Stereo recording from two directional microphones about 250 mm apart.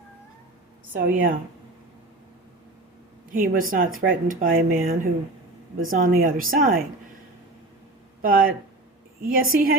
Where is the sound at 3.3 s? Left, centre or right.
Right.